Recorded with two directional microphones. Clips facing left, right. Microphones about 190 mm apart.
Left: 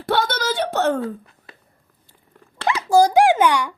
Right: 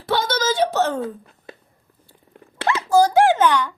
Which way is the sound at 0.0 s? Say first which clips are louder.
Even; 60° left (ahead or behind).